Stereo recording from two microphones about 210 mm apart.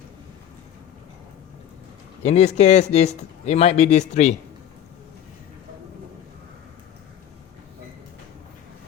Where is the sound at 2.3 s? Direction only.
30° left (ahead or behind).